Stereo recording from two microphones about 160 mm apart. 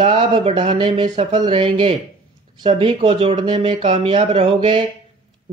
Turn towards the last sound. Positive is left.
turn(degrees=-30)  # may be behind; listen again after turning